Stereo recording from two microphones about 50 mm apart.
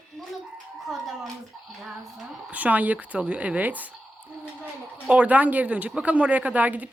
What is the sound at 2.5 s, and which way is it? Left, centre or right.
Speech, right.